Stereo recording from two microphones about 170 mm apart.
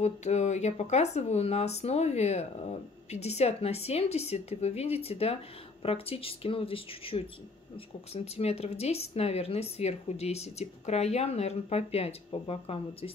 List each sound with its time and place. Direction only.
0.0 s speech: 40° left (ahead or behind)